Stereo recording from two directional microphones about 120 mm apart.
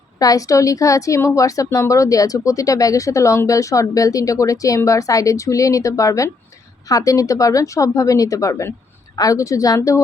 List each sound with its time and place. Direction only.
0.2 s speech: 30° left (ahead or behind)